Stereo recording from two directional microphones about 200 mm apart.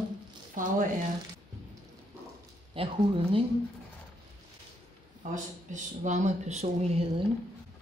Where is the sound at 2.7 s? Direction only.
25° right (ahead or behind).